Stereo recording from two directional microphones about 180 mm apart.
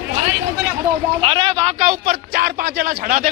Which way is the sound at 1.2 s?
30° right (ahead or behind).